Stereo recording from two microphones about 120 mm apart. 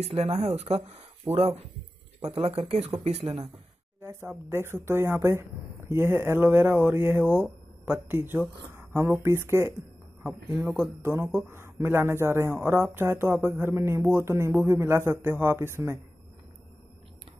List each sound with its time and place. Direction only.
0.0 s speech: 65° right (ahead or behind)
1.3 s speech: 15° right (ahead or behind)
2.3 s speech: 55° right (ahead or behind)
4.0 s speech: 20° right (ahead or behind)
11.0 s speech: 20° right (ahead or behind)